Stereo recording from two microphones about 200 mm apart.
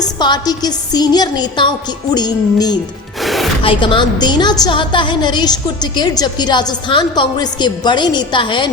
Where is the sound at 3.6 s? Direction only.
25° left (ahead or behind).